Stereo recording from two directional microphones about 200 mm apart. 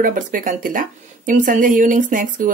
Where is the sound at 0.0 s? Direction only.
40° right (ahead or behind).